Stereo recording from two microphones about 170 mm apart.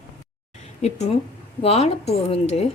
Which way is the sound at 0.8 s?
40° left (ahead or behind).